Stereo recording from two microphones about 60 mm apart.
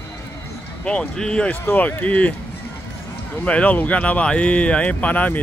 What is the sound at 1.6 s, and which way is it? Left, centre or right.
Speech, left.